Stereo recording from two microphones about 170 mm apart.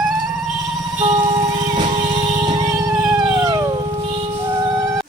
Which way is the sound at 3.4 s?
20° right (ahead or behind).